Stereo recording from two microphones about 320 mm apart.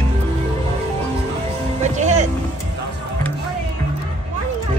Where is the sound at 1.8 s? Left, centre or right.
Right.